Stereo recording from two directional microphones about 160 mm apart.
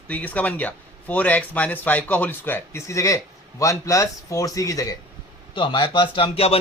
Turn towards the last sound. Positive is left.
turn(degrees=35)  # may be behind; listen again after turning